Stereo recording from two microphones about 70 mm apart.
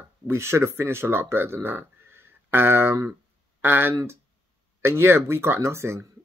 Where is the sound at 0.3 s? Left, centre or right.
Right.